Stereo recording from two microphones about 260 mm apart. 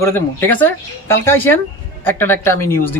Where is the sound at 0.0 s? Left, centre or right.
Centre.